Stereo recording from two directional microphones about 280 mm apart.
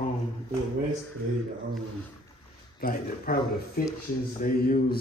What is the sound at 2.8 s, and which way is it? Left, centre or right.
Speech, left.